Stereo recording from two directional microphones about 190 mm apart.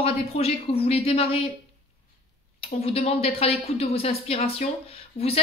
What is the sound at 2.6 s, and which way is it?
Speech, 30° left (ahead or behind).